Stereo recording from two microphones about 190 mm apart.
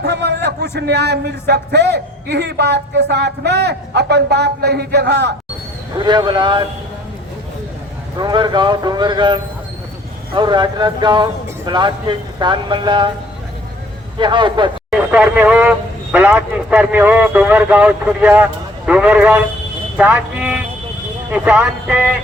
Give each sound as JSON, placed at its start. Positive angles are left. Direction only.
{"t": 0.0, "sound": "a sound", "side_deg": -60}
{"t": 0.8, "sound": "a man's voice", "side_deg": -60}
{"t": 6.0, "sound": "speech", "side_deg": -25}
{"t": 8.2, "sound": "speech", "side_deg": -25}
{"t": 14.2, "sound": "speech", "side_deg": -25}
{"t": 14.8, "sound": "a man's voice", "side_deg": -10}